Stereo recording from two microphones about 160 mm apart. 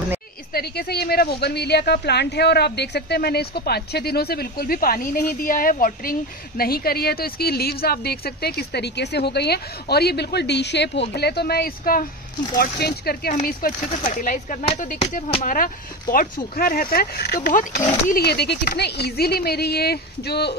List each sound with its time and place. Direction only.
0.5 s speech: 75° left (ahead or behind)
12.5 s speech: 80° left; by 14.6 s 55° left (ahead or behind)
14.6 s speech: 40° left (ahead or behind); by 17.5 s 80° left
17.8 s speech: 55° left (ahead or behind)
18.2 s speech: 90° left